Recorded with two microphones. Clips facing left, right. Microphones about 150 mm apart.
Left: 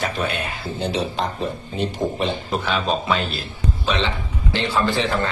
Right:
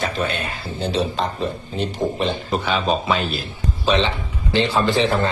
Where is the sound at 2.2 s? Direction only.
Centre (ahead or behind).